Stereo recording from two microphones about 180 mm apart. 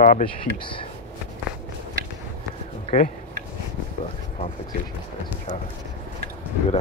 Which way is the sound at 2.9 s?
40° left (ahead or behind).